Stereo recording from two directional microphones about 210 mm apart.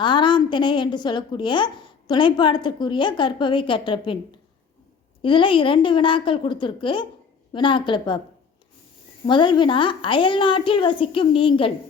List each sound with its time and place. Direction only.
0.0 s a woman's voice: 20° left (ahead or behind)
9.2 s a woman's voice: 20° left (ahead or behind)